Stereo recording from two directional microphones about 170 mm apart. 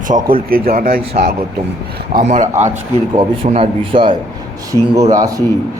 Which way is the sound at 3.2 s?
35° right (ahead or behind).